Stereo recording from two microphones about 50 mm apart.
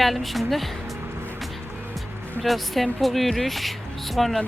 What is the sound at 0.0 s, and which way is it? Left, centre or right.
Speech, centre.